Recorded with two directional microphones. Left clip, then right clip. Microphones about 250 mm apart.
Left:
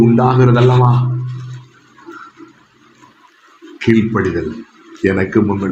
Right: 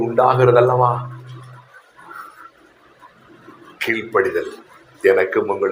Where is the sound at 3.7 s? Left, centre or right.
Right.